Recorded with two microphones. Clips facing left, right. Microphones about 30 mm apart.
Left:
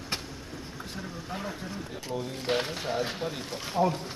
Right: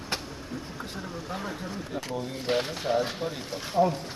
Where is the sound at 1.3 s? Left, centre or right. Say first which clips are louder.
Right 1 dB; centre.